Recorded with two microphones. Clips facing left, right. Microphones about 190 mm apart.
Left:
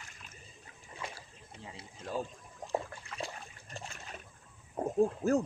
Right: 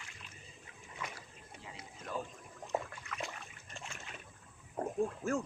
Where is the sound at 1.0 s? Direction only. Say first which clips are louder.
Left 2 dB; 30° left (ahead or behind).